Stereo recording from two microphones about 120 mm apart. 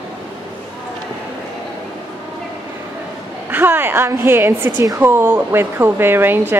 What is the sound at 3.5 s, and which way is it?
Speech, 15° right (ahead or behind).